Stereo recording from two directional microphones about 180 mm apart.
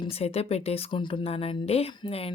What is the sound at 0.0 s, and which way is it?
Speech, 35° left (ahead or behind).